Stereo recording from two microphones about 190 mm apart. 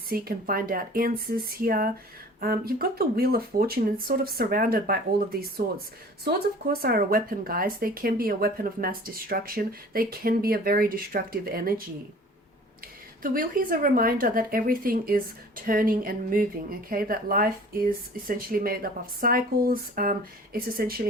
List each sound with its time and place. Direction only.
0.1 s speech: 50° right (ahead or behind)
13.2 s speech: 45° right (ahead or behind)